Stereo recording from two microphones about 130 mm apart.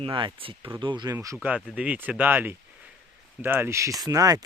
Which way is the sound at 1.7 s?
10° right (ahead or behind).